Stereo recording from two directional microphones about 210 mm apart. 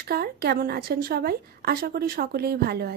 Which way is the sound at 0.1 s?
50° right (ahead or behind).